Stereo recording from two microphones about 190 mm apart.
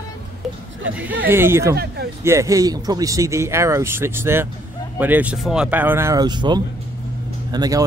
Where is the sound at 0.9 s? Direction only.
10° right (ahead or behind).